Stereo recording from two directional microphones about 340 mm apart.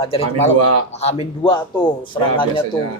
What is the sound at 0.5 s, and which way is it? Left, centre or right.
Speech, right.